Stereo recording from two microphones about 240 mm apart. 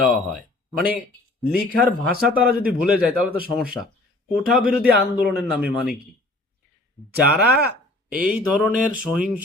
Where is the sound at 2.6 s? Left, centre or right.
Centre.